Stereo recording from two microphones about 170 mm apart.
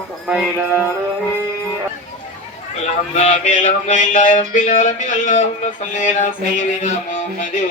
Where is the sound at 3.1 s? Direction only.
40° left (ahead or behind).